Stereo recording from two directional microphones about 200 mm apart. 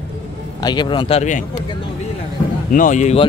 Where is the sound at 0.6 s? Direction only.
20° left (ahead or behind); by 1.4 s 35° left (ahead or behind).